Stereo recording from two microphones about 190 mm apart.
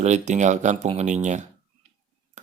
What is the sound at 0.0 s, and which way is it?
A man's voice, 40° right (ahead or behind).